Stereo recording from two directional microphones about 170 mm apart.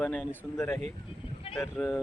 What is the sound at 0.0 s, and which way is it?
Speech, 5° left (ahead or behind).